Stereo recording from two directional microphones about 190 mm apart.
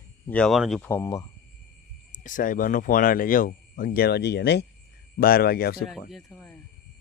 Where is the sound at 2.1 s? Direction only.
45° left (ahead or behind); by 4.7 s 60° left (ahead or behind).